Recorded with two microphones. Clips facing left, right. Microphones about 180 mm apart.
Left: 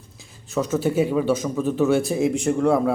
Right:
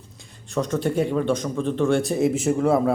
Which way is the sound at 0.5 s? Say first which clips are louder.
Left 2 dB; 5° left (ahead or behind).